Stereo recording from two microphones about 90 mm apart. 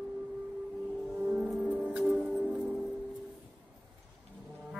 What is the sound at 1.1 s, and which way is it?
Music, 20° right (ahead or behind).